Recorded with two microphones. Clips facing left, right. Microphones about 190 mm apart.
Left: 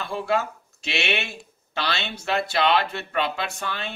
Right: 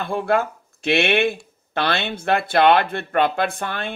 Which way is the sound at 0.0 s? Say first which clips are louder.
Right 4 dB; 55° right (ahead or behind).